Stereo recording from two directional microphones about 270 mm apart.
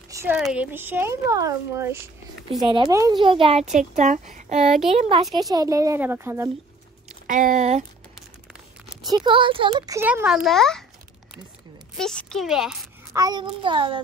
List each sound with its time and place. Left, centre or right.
0.1 s speech: centre; by 4.6 s right
4.6 s a child's voice: centre
4.9 s speech: centre
7.2 s speech: right
9.0 s speech: centre
12.0 s a child's voice: centre
13.2 s speech: centre